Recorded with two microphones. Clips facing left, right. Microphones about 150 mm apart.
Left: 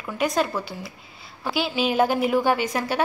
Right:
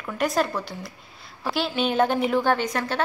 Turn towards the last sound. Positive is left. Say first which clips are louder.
# left 1 dB
turn(degrees=10)  # may be behind; listen again after turning